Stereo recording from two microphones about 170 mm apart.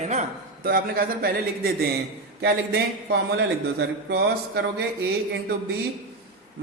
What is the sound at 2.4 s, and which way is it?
A man's voice, 75° right (ahead or behind).